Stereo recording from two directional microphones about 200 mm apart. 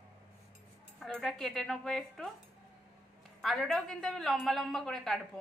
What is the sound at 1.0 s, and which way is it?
A woman's voice, centre (ahead or behind).